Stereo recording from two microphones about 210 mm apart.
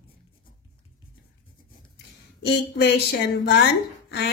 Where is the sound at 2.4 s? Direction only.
50° left (ahead or behind).